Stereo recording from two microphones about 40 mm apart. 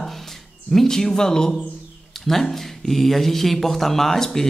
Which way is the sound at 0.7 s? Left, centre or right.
Centre.